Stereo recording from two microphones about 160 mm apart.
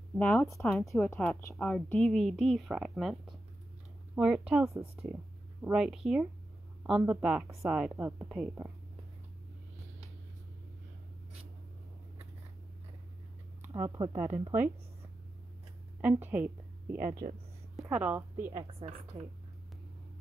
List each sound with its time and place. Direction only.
0.2 s speech: 10° left (ahead or behind)
0.8 s speech: 15° left (ahead or behind); by 7.9 s 5° right (ahead or behind)
7.9 s a woman's voice: 15° right (ahead or behind)
8.3 s speech: 5° right (ahead or behind)
13.6 s a sound: 15° right (ahead or behind)
13.9 s speech: 25° right (ahead or behind)
16.0 s a woman's voice: 10° right (ahead or behind)
18.6 s a woman's voice: 35° right (ahead or behind)